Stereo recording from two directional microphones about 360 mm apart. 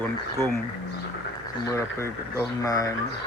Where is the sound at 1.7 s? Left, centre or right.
Centre.